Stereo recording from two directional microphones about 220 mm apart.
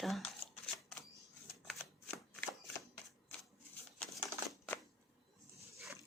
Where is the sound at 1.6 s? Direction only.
Centre (ahead or behind).